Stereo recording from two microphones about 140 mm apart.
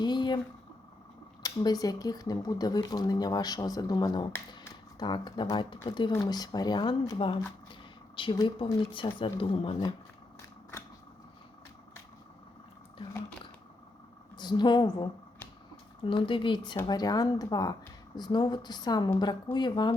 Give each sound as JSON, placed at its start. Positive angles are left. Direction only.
{"t": 0.0, "sound": "speech", "side_deg": 30}
{"t": 1.4, "sound": "speech", "side_deg": 25}
{"t": 14.3, "sound": "speech", "side_deg": 30}
{"t": 16.0, "sound": "speech", "side_deg": 40}